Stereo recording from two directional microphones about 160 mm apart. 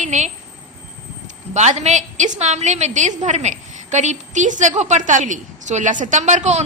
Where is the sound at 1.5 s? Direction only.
45° right (ahead or behind).